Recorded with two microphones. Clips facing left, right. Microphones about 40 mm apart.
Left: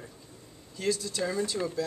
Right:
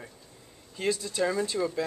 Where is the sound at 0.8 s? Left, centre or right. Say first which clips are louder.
Right 1 dB; right.